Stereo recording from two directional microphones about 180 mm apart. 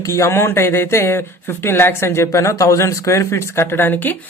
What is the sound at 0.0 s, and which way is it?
Speech, 15° left (ahead or behind).